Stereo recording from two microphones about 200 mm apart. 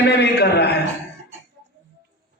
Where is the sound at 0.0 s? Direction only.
55° left (ahead or behind).